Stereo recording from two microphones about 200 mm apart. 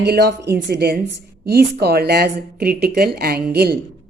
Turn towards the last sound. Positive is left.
turn(degrees=-50)  # may be behind; listen again after turning